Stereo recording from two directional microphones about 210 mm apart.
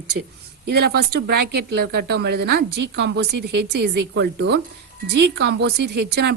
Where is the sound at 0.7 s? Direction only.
50° right (ahead or behind).